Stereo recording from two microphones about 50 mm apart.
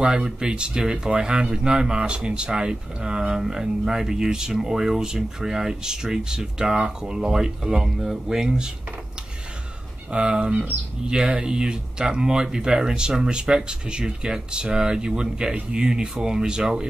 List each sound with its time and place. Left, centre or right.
0.0 s speech: centre
10.1 s speech: right